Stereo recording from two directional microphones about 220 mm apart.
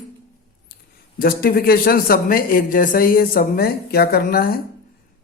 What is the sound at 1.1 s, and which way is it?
Speech, 40° left (ahead or behind).